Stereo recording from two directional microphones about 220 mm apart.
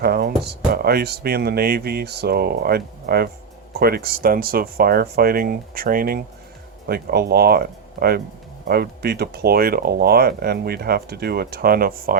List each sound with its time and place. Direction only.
0.0 s speech: 45° right (ahead or behind)